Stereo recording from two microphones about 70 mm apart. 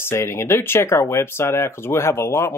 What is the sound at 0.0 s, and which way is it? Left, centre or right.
Speech, left.